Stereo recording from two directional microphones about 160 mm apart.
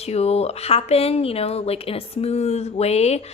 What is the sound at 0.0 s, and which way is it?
A woman's voice, 40° left (ahead or behind).